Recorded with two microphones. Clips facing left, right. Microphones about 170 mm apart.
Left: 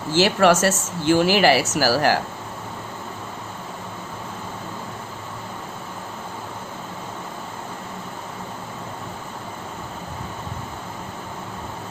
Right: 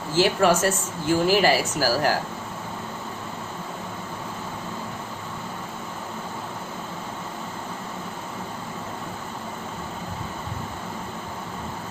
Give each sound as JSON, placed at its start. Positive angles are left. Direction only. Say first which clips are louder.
{"t": 0.1, "sound": "speech", "louder": "left 3 dB", "side_deg": 75}